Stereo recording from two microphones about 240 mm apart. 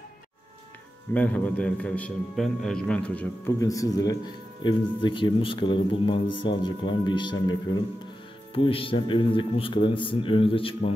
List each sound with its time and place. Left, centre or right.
1.1 s a man's voice: centre; by 10.9 s left